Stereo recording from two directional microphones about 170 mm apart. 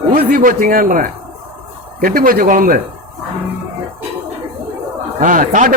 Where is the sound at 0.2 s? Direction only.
60° right (ahead or behind).